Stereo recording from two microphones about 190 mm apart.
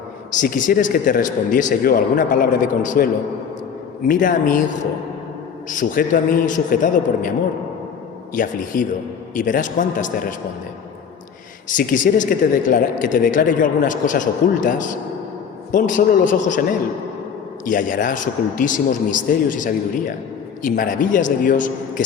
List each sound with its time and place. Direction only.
0.3 s speech: 45° left (ahead or behind)
5.6 s speech: 45° left (ahead or behind)
11.7 s speech: 45° left (ahead or behind)
17.7 s speech: 45° left (ahead or behind)